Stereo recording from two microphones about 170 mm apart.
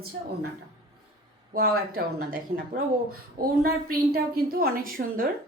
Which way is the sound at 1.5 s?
60° right (ahead or behind).